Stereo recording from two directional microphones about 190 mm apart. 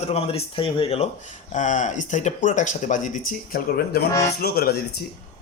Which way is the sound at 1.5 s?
40° left (ahead or behind).